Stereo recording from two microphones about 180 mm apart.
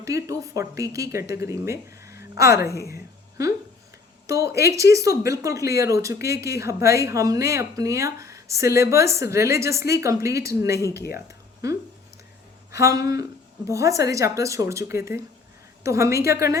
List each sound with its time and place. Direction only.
0.0 s speech: 20° right (ahead or behind)
2.9 s a sound: 20° right (ahead or behind)
4.3 s speech: 15° right (ahead or behind)
10.9 s speech: 60° left (ahead or behind)
11.3 s a sound: 15° right (ahead or behind)
12.8 s speech: 20° right (ahead or behind)